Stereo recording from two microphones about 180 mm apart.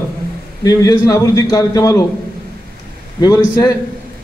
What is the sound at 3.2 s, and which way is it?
Speech, 20° left (ahead or behind).